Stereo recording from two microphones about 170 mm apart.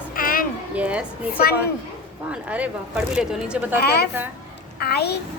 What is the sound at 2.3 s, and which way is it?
A woman's voice, 5° right (ahead or behind).